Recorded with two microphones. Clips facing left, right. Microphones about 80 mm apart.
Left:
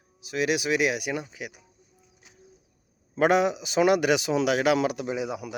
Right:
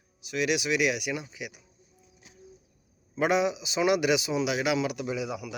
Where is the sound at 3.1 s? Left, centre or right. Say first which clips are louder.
Left 4 dB; left.